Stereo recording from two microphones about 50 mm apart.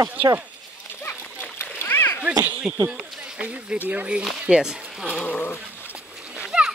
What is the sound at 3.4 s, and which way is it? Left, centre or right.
Speech, right.